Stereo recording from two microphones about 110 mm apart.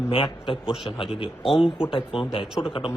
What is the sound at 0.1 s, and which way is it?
Speech, 50° left (ahead or behind).